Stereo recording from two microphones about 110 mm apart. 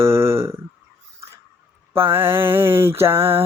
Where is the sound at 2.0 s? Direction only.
20° right (ahead or behind).